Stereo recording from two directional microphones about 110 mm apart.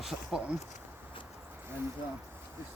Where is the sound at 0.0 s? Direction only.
5° right (ahead or behind).